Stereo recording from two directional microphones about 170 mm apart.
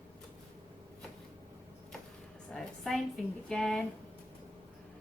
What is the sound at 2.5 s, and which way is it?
A woman's voice, centre (ahead or behind).